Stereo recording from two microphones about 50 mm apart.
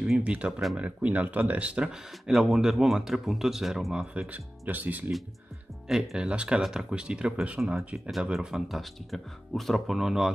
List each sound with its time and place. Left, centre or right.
0.2 s speech: right
0.5 s speech: centre
0.7 s speech: right
1.9 s speech: centre
4.3 s speech: right
5.9 s speech: centre
9.1 s speech: centre